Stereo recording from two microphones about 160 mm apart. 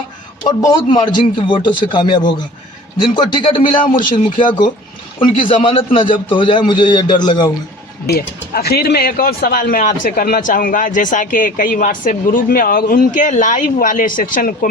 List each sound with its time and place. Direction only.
0.4 s a man's voice: 30° left (ahead or behind)
3.8 s speech: 55° left (ahead or behind)
4.1 s a man's voice: 30° left (ahead or behind)
8.0 s speech: 75° left (ahead or behind); by 14.7 s 60° left (ahead or behind)